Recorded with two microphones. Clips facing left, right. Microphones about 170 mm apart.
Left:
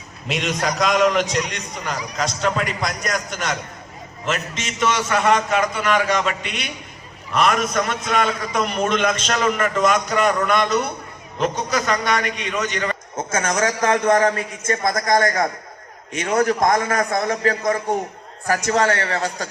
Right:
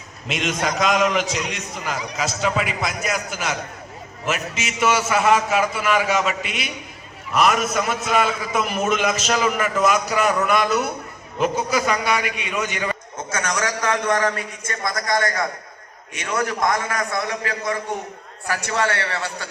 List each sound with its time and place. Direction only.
0.3 s a man's voice: centre (ahead or behind)
13.1 s a man's voice: 50° left (ahead or behind)